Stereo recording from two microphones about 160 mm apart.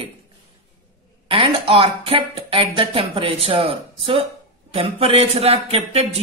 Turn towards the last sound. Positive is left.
turn(degrees=-40)  # may be behind; listen again after turning